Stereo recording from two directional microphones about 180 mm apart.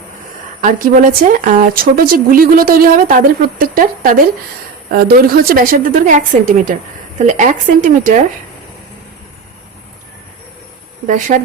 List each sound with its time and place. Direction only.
0.6 s speech: 50° right (ahead or behind)
11.0 s speech: 45° right (ahead or behind)